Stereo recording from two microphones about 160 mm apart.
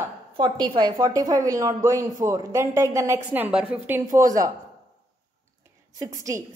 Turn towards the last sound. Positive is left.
turn(degrees=-20)  # may be behind; listen again after turning